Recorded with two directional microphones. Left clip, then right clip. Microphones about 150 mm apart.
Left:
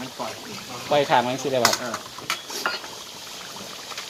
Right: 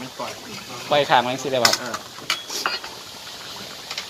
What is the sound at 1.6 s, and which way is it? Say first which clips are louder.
Dishes: right 2 dB; 90° left.